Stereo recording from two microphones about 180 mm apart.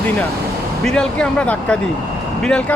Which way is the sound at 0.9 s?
5° left (ahead or behind).